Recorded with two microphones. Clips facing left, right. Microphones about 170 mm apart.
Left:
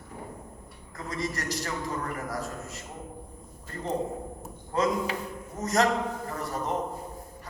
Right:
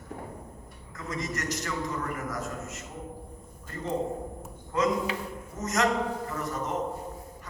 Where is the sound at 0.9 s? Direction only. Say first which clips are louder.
Left 1 dB; 35° left (ahead or behind).